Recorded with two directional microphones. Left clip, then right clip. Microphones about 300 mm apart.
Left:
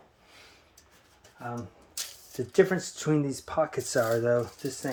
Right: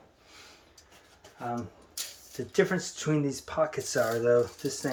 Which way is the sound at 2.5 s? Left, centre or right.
Centre.